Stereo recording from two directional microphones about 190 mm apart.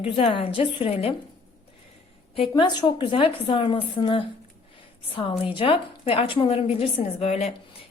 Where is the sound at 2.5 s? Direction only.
20° left (ahead or behind).